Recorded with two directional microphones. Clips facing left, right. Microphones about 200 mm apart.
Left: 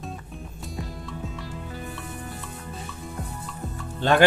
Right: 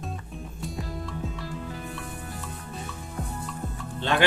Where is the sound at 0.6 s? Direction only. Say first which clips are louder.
Right 2 dB; centre (ahead or behind).